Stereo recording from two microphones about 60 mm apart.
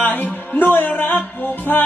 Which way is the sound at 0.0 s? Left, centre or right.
Left.